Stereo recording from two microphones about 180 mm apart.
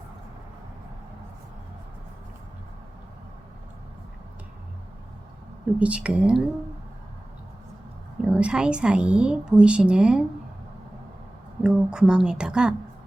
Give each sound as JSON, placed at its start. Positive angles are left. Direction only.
{"t": 5.8, "sound": "a woman's voice", "side_deg": -5}
{"t": 8.2, "sound": "a woman's voice", "side_deg": -5}
{"t": 11.6, "sound": "a woman's voice", "side_deg": -5}